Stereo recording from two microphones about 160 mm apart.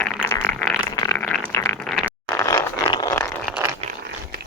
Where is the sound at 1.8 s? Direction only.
5° left (ahead or behind).